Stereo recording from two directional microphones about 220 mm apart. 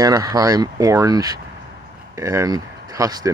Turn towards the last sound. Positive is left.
turn(degrees=-15)  # may be behind; listen again after turning